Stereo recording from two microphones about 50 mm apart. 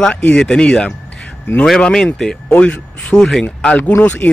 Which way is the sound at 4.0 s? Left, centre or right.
Left.